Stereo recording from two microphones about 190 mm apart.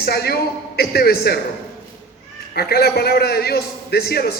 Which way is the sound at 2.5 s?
55° left (ahead or behind).